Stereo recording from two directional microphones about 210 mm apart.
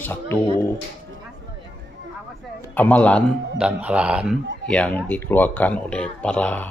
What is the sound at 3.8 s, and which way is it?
Speech, 5° right (ahead or behind).